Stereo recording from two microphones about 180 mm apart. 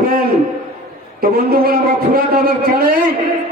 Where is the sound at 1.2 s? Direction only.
55° right (ahead or behind).